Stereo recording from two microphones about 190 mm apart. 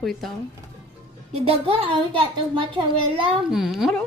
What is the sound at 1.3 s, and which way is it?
A child's voice, 30° right (ahead or behind).